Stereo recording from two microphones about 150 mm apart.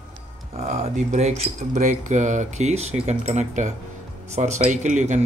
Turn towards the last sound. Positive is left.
turn(degrees=-50)  # may be behind; listen again after turning